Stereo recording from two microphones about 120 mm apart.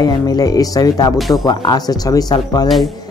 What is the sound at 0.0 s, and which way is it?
Speech, 30° left (ahead or behind).